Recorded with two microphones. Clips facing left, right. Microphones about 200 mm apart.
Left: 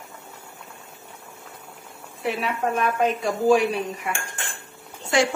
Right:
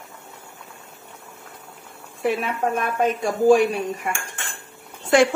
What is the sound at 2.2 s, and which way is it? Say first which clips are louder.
A woman's voice: right 3 dB; 45° right (ahead or behind).